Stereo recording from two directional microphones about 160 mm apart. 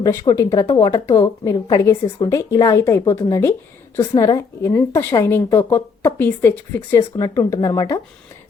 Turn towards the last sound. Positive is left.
turn(degrees=20)  # may be behind; listen again after turning